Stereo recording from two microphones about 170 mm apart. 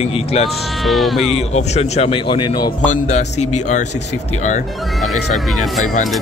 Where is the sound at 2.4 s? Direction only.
25° left (ahead or behind).